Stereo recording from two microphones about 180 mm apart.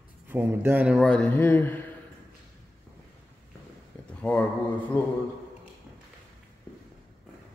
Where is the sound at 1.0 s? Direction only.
5° left (ahead or behind).